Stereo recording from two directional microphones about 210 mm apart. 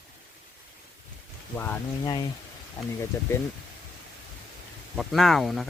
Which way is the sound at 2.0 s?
20° left (ahead or behind).